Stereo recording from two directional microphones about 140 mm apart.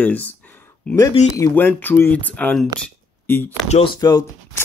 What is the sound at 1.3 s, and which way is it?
Speech, 20° left (ahead or behind).